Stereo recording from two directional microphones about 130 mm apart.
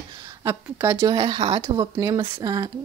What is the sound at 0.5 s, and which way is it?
Speech, 20° right (ahead or behind).